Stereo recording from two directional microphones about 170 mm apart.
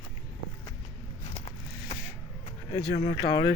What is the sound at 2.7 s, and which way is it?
Speech, 35° left (ahead or behind).